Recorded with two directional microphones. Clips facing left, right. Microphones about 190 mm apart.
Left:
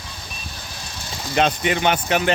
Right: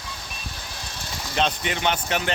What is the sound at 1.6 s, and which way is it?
Speech, 5° left (ahead or behind).